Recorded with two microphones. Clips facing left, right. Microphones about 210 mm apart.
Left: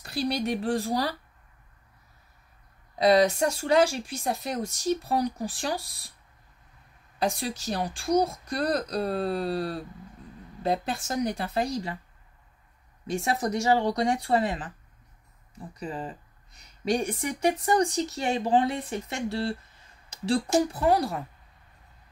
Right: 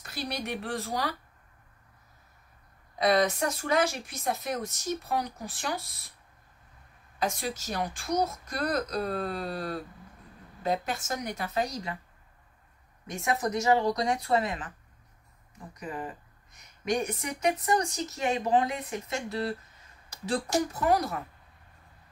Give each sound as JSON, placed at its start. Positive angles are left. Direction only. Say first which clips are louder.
{"t": 0.0, "sound": "speech", "louder": "left 7 dB", "side_deg": 30}
{"t": 3.0, "sound": "speech", "louder": "left 4 dB", "side_deg": 30}
{"t": 7.2, "sound": "speech", "louder": "left 3 dB", "side_deg": 35}
{"t": 13.0, "sound": "speech", "louder": "left 2 dB", "side_deg": 30}
{"t": 15.7, "sound": "speech", "louder": "left 2 dB", "side_deg": 30}